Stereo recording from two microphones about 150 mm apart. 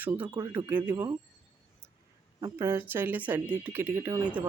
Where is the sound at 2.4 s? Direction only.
20° right (ahead or behind).